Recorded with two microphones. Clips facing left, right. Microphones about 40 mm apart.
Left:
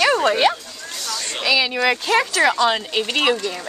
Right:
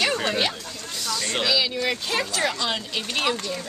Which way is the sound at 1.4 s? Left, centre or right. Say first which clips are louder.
Left 6 dB; left.